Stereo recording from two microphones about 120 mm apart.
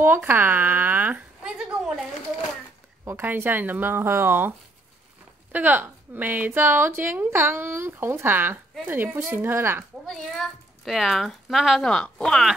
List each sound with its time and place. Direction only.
0.0 s a sound: 20° right (ahead or behind)
3.1 s a woman's voice: 20° right (ahead or behind)
10.9 s speech: centre (ahead or behind)